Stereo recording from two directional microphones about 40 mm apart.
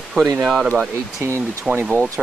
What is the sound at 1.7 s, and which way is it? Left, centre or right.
Speech, centre.